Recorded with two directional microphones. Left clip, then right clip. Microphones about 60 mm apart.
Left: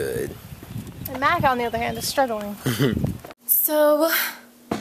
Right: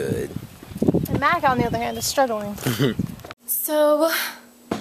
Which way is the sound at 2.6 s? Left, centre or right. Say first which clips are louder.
Left 1 dB; centre.